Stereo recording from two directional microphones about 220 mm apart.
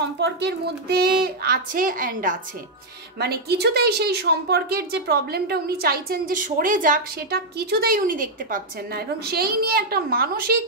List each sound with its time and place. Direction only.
0.2 s a woman's voice: 50° right (ahead or behind)